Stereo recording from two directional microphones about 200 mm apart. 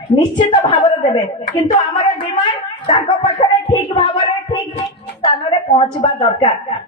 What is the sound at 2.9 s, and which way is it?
Speech, 25° left (ahead or behind).